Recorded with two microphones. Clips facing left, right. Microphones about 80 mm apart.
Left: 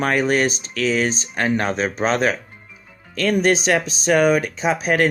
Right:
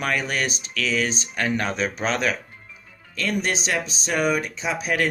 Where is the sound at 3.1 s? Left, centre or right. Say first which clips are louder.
Left 8 dB; left.